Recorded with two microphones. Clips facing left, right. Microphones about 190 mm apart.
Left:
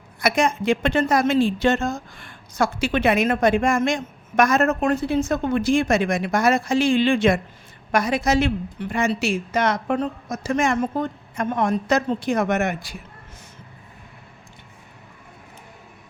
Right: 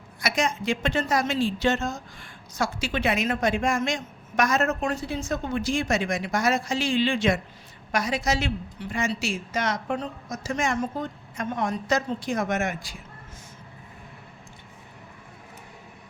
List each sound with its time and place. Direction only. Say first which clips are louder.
0.2 s a woman's voice: left 6 dB; 55° left (ahead or behind)